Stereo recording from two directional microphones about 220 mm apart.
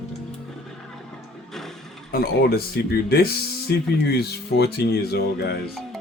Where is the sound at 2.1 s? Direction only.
45° left (ahead or behind).